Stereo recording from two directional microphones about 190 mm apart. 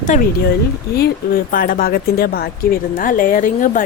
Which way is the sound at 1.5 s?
50° left (ahead or behind).